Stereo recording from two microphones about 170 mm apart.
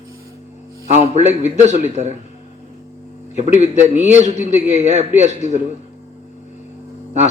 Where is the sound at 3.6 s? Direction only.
45° right (ahead or behind).